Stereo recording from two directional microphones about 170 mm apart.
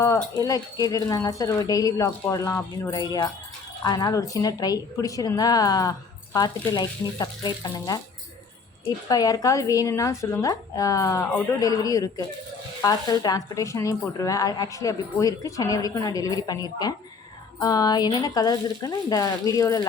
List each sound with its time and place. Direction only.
0.0 s a woman's voice: 20° left (ahead or behind)
9.0 s a woman's voice: 20° left (ahead or behind)